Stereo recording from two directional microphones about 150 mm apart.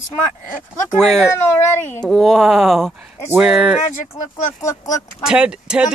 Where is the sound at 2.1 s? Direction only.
Centre (ahead or behind).